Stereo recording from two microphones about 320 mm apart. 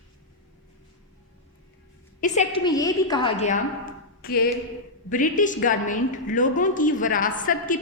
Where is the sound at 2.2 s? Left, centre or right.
Left.